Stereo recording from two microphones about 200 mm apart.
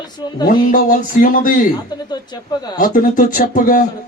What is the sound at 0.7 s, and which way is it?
Speech, 40° left (ahead or behind).